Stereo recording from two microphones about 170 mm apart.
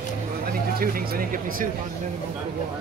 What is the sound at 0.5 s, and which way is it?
Speech, 60° right (ahead or behind).